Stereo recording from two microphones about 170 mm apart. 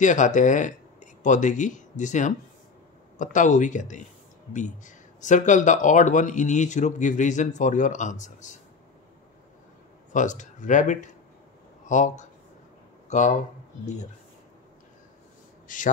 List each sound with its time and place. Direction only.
0.0 s speech: 45° left (ahead or behind)
10.1 s speech: 45° left (ahead or behind)
15.7 s speech: 50° left (ahead or behind)